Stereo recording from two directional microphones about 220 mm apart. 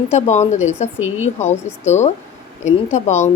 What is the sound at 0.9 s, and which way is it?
Speech, 65° left (ahead or behind).